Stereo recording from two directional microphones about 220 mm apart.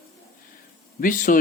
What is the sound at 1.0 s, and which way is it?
Speech, 35° left (ahead or behind).